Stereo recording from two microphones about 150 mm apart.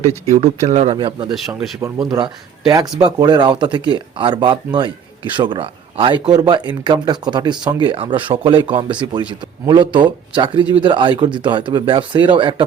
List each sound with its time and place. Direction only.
0.3 s speech: 50° right (ahead or behind)
0.9 s speech: 30° right (ahead or behind)
1.3 s speech: centre (ahead or behind)
2.1 s speech: 30° right (ahead or behind)